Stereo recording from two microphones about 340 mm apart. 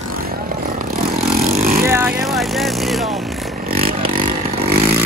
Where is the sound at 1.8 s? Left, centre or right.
Centre.